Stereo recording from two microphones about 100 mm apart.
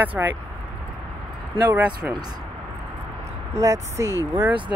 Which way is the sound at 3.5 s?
30° right (ahead or behind).